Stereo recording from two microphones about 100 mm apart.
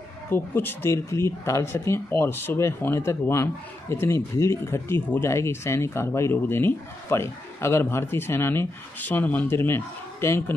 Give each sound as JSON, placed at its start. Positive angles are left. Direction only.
{"t": 0.3, "sound": "speech", "side_deg": 20}